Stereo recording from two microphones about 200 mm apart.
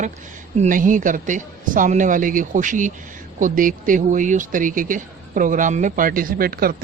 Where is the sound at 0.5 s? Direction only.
40° right (ahead or behind).